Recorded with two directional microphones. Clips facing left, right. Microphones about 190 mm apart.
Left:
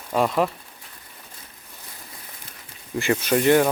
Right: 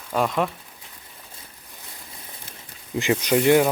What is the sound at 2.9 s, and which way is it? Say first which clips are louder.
Speech: right 1 dB; 15° right (ahead or behind).